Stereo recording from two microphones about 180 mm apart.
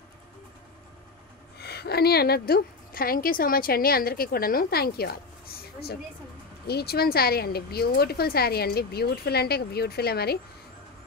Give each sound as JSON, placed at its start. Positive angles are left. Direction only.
{"t": 1.6, "sound": "a woman's voice", "side_deg": 60}